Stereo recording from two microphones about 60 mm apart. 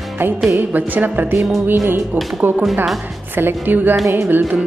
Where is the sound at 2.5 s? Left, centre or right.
Right.